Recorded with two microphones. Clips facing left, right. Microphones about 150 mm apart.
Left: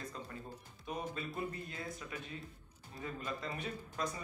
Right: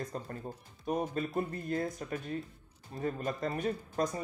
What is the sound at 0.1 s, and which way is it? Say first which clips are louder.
Speech: right 6 dB; 45° right (ahead or behind).